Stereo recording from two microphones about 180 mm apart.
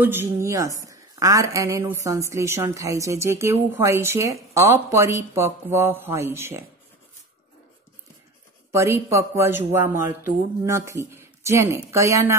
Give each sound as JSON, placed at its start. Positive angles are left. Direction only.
{"t": 0.0, "sound": "a woman's voice", "side_deg": -10}
{"t": 8.7, "sound": "a woman's voice", "side_deg": -15}